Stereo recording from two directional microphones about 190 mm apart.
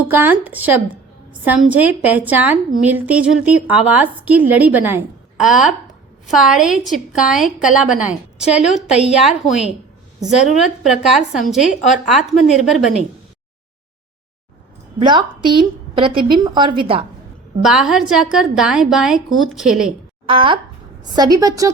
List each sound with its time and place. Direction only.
0.1 s a woman's voice: 10° right (ahead or behind)
10.3 s a woman's voice: 40° left (ahead or behind)
10.8 s a woman's voice: centre (ahead or behind)
11.6 s a woman's voice: 40° left (ahead or behind)
12.0 s a woman's voice: centre (ahead or behind)
14.9 s a woman's voice: 25° right (ahead or behind)
17.6 s a woman's voice: 5° right (ahead or behind)
20.2 s a woman's voice: 25° right (ahead or behind)